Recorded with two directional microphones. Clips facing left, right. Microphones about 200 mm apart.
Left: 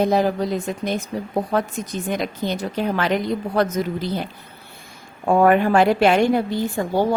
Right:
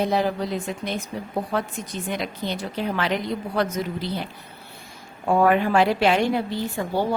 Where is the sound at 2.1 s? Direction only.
45° left (ahead or behind).